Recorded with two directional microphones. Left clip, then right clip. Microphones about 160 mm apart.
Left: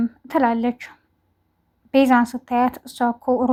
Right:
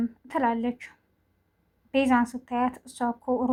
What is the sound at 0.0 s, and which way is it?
A woman's voice, 30° left (ahead or behind).